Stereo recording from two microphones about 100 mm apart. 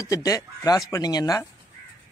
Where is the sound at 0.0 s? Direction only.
35° left (ahead or behind).